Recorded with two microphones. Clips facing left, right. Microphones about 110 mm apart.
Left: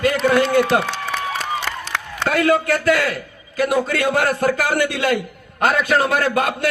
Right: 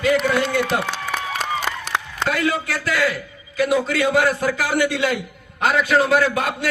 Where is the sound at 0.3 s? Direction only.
50° left (ahead or behind).